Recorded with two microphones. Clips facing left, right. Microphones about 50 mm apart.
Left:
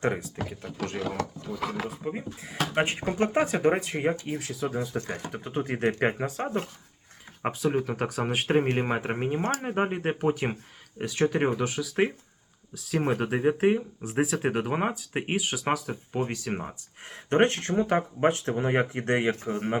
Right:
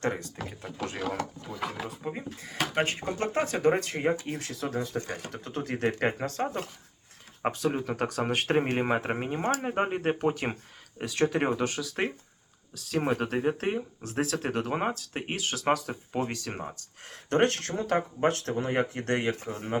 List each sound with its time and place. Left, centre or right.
0.0 s speech: centre
0.9 s speech: centre
2.4 s speech: centre
5.3 s speech: centre
17.2 s speech: left